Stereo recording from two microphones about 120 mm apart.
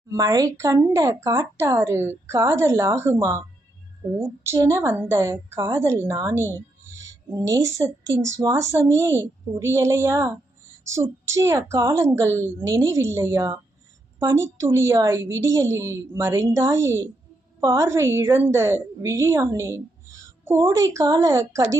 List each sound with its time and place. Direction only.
0.1 s speech: 30° right (ahead or behind)